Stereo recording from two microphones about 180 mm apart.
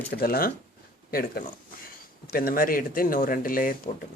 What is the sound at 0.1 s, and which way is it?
Speech, 55° left (ahead or behind).